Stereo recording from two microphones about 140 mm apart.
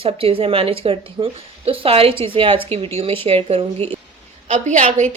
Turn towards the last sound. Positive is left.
turn(degrees=-55)  # may be behind; listen again after turning